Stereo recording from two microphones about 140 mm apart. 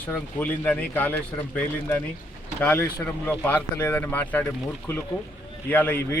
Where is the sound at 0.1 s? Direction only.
10° left (ahead or behind).